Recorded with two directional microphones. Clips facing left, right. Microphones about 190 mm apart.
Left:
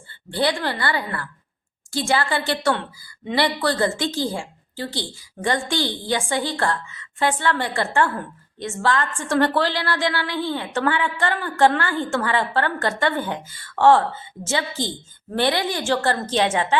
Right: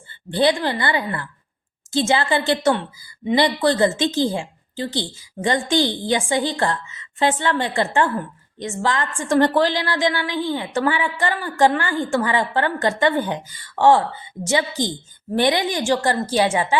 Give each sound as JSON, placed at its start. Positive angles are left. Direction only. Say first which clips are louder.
{"t": 0.1, "sound": "a woman's voice", "louder": "right 4 dB", "side_deg": -20}